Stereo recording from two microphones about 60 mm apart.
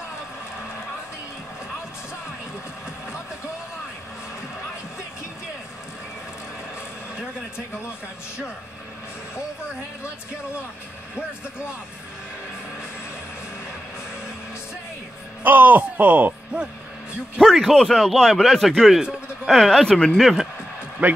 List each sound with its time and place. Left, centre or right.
15.4 s speech: right
17.4 s a man's voice: centre
20.2 s a man's voice: centre
21.0 s speech: right